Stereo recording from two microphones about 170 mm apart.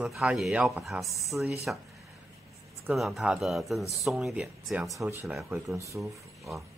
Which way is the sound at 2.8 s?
Centre (ahead or behind).